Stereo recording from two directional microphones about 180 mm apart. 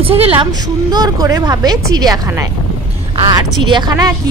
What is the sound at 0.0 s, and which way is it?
A woman's voice, 30° right (ahead or behind).